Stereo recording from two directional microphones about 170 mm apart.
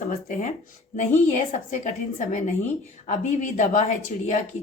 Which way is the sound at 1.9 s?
45° left (ahead or behind).